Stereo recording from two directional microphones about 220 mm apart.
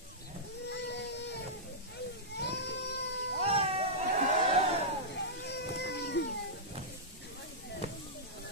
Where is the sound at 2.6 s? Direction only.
50° left (ahead or behind).